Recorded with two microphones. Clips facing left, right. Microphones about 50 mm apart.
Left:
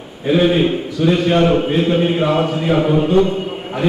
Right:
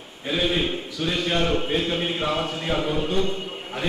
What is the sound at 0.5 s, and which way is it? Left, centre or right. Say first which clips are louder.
A man's voice: left 9 dB; centre.